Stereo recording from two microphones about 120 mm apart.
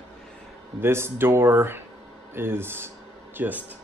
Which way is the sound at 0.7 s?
20° right (ahead or behind).